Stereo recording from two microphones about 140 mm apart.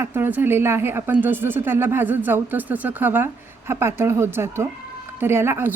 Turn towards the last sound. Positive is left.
turn(degrees=-15)  # may be behind; listen again after turning